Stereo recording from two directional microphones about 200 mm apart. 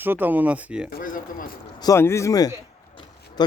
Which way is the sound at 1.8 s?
15° left (ahead or behind).